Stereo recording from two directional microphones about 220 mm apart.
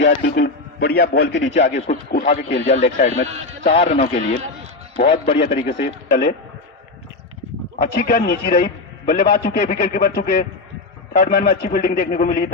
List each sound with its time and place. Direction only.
0.0 s a man's voice: 50° left (ahead or behind)
2.6 s speech: 30° left (ahead or behind)
3.2 s a man's voice: 30° right (ahead or behind)
3.6 s a man's voice: 30° left (ahead or behind)
5.4 s a man's voice: 50° left (ahead or behind)
7.8 s a man's voice: 45° left (ahead or behind)